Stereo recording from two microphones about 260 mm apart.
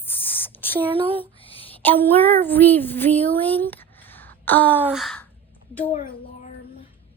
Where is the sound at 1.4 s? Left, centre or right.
Left.